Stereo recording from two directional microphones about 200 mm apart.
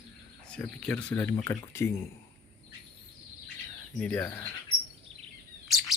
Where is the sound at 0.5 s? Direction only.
5° left (ahead or behind).